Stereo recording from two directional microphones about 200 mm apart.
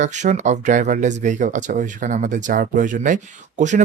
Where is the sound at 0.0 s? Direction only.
35° right (ahead or behind).